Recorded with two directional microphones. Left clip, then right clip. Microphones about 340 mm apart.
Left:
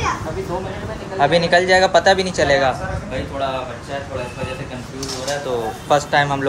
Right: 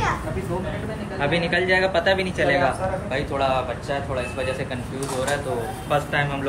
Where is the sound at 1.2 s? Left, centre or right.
Centre.